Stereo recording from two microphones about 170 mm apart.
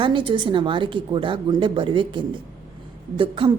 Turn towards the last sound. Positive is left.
turn(degrees=-30)  # may be behind; listen again after turning